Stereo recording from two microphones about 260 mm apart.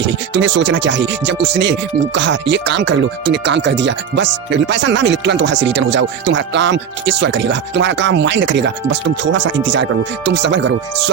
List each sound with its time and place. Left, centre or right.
0.0 s speech: right